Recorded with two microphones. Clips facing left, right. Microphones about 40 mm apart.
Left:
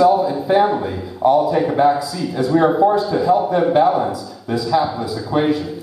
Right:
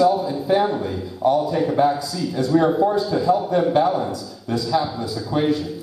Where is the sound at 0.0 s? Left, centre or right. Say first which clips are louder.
Left 4 dB; centre.